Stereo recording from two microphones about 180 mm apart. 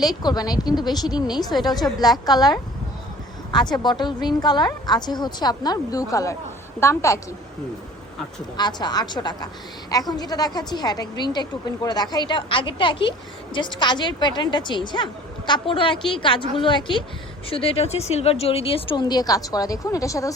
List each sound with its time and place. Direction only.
0.0 s a woman's voice: 20° left (ahead or behind)
8.5 s a woman's voice: 25° left (ahead or behind)